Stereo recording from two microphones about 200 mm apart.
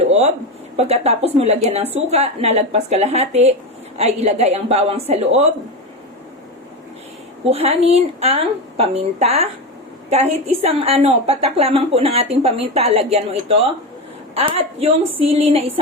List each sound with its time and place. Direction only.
0.1 s a woman's voice: 35° right (ahead or behind)
7.5 s a woman's voice: 30° right (ahead or behind)